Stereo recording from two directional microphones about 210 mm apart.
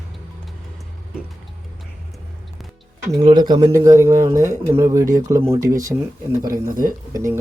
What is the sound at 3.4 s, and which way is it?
Speech, 20° right (ahead or behind).